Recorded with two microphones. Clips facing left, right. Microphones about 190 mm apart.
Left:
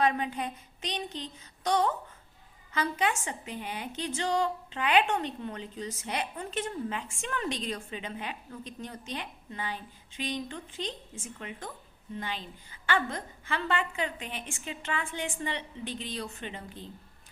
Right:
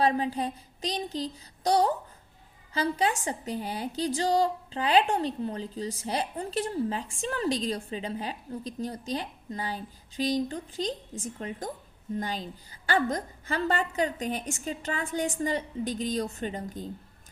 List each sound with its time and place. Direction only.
0.0 s a woman's voice: 35° right (ahead or behind)